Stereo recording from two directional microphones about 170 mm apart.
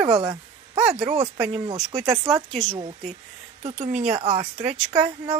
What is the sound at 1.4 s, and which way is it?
Speech, 35° right (ahead or behind).